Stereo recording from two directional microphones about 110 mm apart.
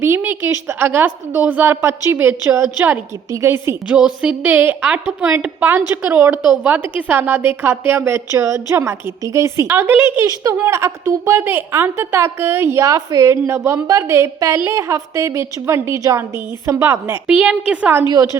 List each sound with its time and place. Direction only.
0.0 s a woman's voice: 20° right (ahead or behind)
3.8 s a woman's voice: 10° right (ahead or behind)
10.2 s a woman's voice: 30° right (ahead or behind)
17.2 s a woman's voice: 10° right (ahead or behind)
18.1 s speech: 30° right (ahead or behind)